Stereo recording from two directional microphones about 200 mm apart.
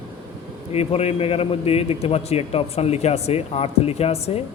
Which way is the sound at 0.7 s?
30° left (ahead or behind).